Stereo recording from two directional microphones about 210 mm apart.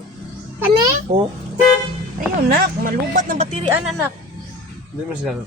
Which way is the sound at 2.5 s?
45° right (ahead or behind).